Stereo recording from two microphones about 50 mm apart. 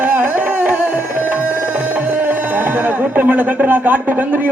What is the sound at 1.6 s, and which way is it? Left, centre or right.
Speech, right.